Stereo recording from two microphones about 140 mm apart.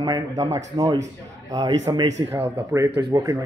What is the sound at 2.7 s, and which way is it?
Speech, 20° right (ahead or behind).